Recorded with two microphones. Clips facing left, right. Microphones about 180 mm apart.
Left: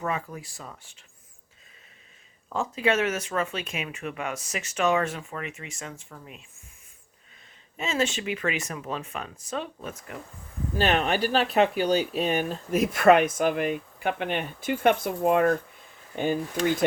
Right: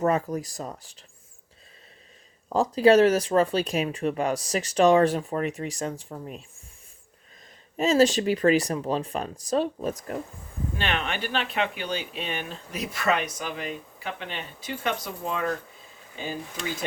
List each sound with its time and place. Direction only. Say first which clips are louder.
0.0 s speech: right 7 dB; 40° right (ahead or behind)
2.5 s speech: right 7 dB; 35° right (ahead or behind)
7.8 s speech: right 8 dB; 35° right (ahead or behind)
10.8 s speech: left 7 dB; 40° left (ahead or behind); by 16.4 s 55° left (ahead or behind)